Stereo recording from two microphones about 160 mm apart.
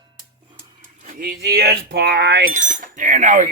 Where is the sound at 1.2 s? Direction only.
80° right.